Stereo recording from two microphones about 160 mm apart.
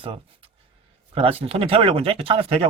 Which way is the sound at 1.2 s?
35° right (ahead or behind).